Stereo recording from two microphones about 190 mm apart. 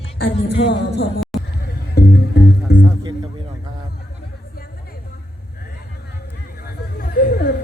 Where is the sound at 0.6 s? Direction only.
65° left (ahead or behind).